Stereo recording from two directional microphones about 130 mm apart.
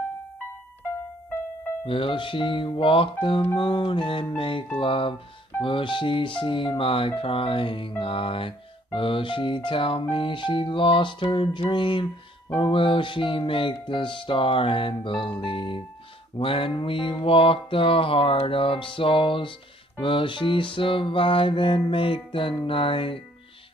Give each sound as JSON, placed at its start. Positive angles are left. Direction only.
{"t": 1.9, "sound": "music", "side_deg": 40}